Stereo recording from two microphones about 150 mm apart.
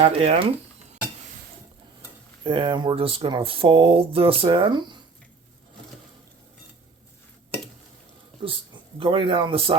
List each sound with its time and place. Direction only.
0.0 s speech: 40° right (ahead or behind)
2.4 s speech: 35° right (ahead or behind)
8.4 s a man's voice: 35° right (ahead or behind)